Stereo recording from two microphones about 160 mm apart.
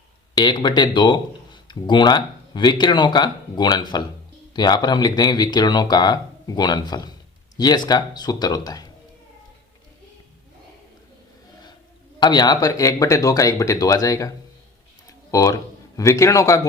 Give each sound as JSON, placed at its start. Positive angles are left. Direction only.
{"t": 0.3, "sound": "speech", "side_deg": 25}
{"t": 12.2, "sound": "speech", "side_deg": 25}
{"t": 15.3, "sound": "speech", "side_deg": 20}